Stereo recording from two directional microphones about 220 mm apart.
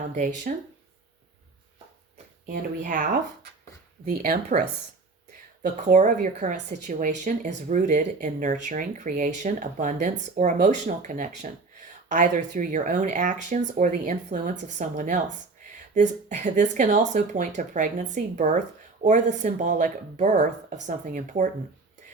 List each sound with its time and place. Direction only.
0.1 s speech: 35° right (ahead or behind)
2.1 s speech: 35° right (ahead or behind)
5.6 s speech: 35° right (ahead or behind)